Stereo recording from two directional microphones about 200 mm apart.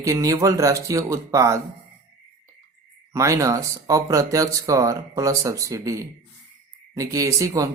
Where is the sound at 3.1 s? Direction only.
15° right (ahead or behind).